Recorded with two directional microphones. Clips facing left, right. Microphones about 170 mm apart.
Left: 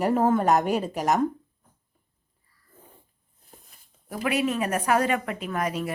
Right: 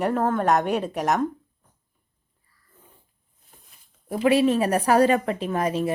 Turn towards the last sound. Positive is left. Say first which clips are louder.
# right 4 dB
turn(degrees=-30)  # may be behind; listen again after turning